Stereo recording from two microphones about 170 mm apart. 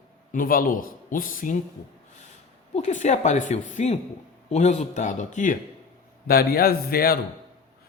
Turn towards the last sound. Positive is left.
turn(degrees=65)  # may be behind; listen again after turning